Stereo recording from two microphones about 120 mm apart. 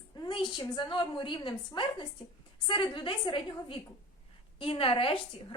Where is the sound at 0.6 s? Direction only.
40° left (ahead or behind).